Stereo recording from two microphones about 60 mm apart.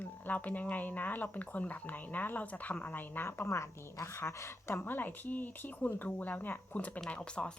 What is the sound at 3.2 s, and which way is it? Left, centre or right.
Speech, left.